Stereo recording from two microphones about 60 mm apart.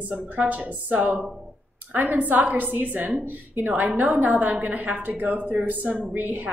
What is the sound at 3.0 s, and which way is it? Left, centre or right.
Speech, centre.